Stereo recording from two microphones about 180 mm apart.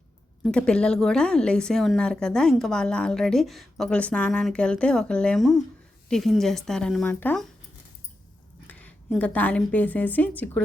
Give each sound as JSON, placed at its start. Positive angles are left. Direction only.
{"t": 0.4, "sound": "a woman's voice", "side_deg": 5}
{"t": 8.6, "sound": "a woman's voice", "side_deg": 10}